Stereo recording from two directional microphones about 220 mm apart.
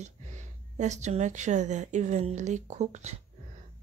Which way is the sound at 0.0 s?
30° right (ahead or behind).